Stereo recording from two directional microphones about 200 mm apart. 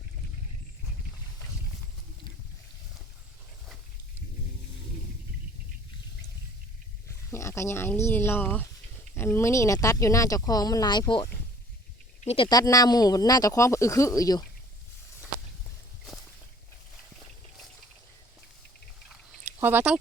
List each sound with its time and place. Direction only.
7.1 s speech: 15° left (ahead or behind); by 12.5 s 30° left (ahead or behind)
12.5 s speech: 20° left (ahead or behind)
19.5 s speech: 10° right (ahead or behind)